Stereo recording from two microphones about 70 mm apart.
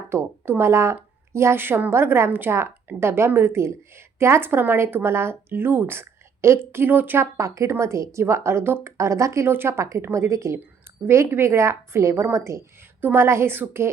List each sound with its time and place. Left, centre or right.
0.1 s a woman's voice: right
7.3 s a woman's voice: right
9.5 s a woman's voice: right